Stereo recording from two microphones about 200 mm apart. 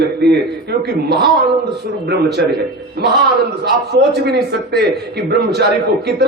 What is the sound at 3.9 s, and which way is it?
A man's voice, 55° right (ahead or behind).